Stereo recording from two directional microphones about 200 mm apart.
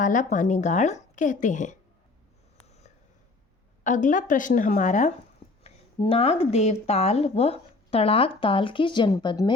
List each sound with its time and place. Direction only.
0.0 s a woman's voice: 40° left (ahead or behind)
3.8 s a woman's voice: 40° left (ahead or behind); by 9.6 s 20° left (ahead or behind)